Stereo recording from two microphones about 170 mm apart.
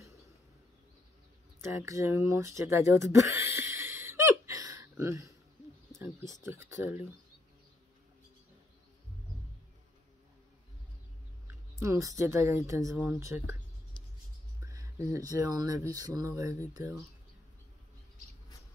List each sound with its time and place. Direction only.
1.7 s speech: 15° right (ahead or behind)
6.4 s speech: 15° right (ahead or behind)
11.4 s speech: 15° right (ahead or behind)
14.6 s speech: 20° right (ahead or behind)